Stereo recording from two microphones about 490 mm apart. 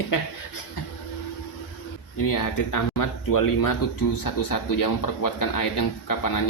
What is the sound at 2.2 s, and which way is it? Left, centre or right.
Speech, left.